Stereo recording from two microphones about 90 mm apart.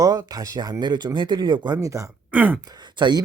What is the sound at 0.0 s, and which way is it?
Speech, 40° right (ahead or behind).